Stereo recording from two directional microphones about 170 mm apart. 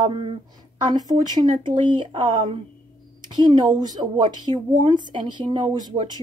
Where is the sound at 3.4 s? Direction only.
25° right (ahead or behind).